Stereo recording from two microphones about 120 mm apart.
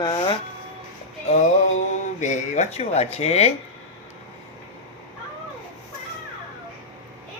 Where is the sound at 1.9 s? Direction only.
75° left (ahead or behind).